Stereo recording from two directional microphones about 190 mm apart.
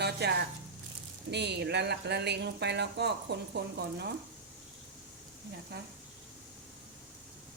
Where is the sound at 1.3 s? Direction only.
60° right (ahead or behind).